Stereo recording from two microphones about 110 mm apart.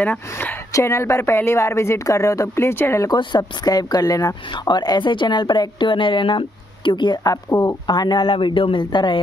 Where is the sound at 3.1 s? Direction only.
40° left (ahead or behind).